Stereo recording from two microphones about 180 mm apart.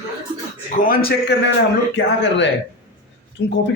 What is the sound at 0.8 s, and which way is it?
Speech, 55° left (ahead or behind).